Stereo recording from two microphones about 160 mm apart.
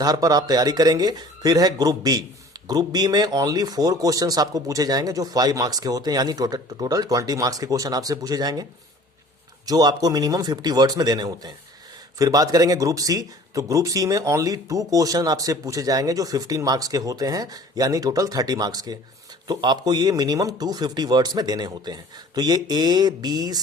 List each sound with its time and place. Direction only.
0.0 s speech: 25° right (ahead or behind)
9.6 s speech: 25° right (ahead or behind)